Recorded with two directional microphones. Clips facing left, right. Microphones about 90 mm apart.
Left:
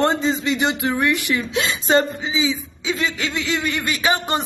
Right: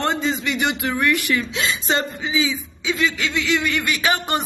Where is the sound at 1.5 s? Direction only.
35° left (ahead or behind).